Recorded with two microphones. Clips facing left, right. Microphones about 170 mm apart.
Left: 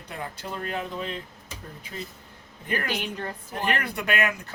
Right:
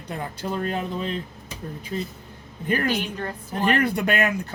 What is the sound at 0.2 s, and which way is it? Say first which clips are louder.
Speech: right 6 dB; 35° right (ahead or behind).